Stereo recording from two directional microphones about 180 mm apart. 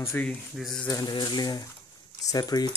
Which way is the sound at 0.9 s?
20° left (ahead or behind).